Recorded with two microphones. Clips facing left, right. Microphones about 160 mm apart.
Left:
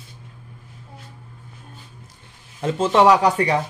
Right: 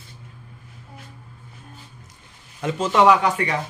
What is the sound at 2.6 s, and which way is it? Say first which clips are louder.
Speech: left 1 dB; 30° left (ahead or behind).